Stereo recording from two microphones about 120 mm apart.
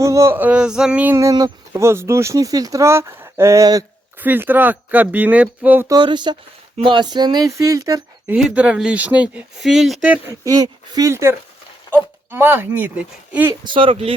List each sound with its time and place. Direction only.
0.0 s speech: 25° right (ahead or behind); by 1.1 s 10° right (ahead or behind)
1.1 s speech: 30° right (ahead or behind)
4.2 s speech: 15° right (ahead or behind)
5.9 s speech: 40° right (ahead or behind)
8.3 s speech: 10° right (ahead or behind)
10.4 s speech: 30° right (ahead or behind); by 13.5 s 15° right (ahead or behind)
13.7 s speech: 50° right (ahead or behind)